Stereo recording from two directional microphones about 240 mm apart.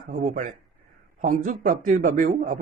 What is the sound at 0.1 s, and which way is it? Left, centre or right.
A man's voice, right.